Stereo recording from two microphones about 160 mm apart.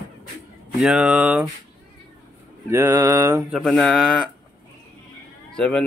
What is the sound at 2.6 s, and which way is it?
Mantra, 15° right (ahead or behind).